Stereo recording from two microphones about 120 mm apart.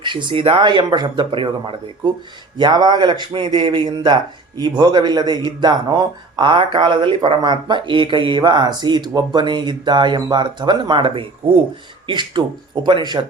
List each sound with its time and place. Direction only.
0.0 s speech: 40° right (ahead or behind)